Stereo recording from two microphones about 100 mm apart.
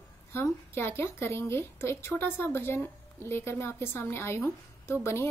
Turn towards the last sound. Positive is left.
turn(degrees=25)  # may be behind; listen again after turning